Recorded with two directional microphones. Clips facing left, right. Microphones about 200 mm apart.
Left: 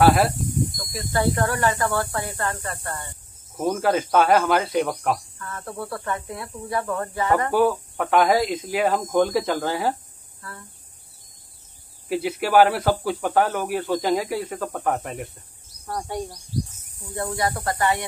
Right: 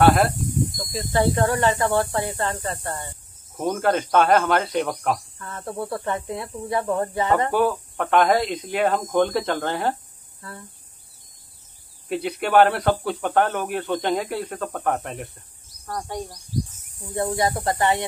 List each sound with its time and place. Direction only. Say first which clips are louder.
0.0 s speech: even; centre (ahead or behind)
0.9 s speech: right 2 dB; 20° right (ahead or behind)
3.5 s speech: even; 5° left (ahead or behind)
5.4 s speech: right 2 dB; 25° right (ahead or behind)
7.5 s speech: left 1 dB; 5° left (ahead or behind)
12.1 s speech: even; 5° left (ahead or behind)
17.1 s speech: right 3 dB; 25° right (ahead or behind)